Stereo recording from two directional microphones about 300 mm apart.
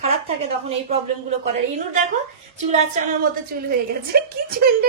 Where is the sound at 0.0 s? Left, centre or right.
Centre.